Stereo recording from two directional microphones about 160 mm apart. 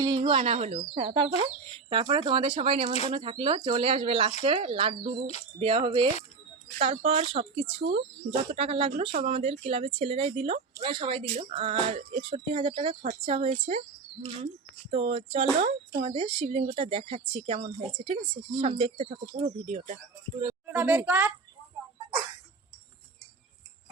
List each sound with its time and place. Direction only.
0.0 s speech: 30° right (ahead or behind); by 20.0 s 45° right (ahead or behind)
20.5 s a child's voice: 10° right (ahead or behind)